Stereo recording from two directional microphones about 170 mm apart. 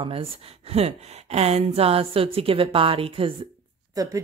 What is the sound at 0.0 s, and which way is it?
Speech, 35° right (ahead or behind).